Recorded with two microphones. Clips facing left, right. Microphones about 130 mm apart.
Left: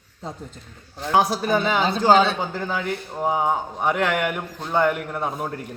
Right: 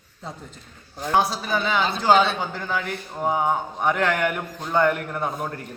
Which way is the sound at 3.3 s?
20° left (ahead or behind).